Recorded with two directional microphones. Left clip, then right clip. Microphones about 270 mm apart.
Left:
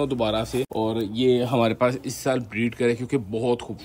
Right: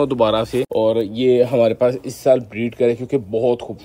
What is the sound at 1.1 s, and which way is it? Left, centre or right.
Speech, right.